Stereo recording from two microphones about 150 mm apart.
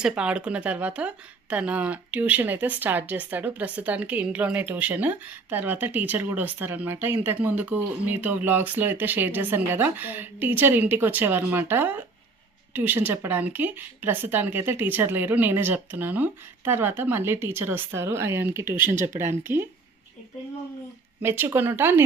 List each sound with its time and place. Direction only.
0.0 s speech: 5° right (ahead or behind)
21.2 s speech: 15° right (ahead or behind)